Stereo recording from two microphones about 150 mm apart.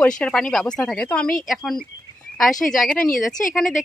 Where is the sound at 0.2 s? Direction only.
5° left (ahead or behind).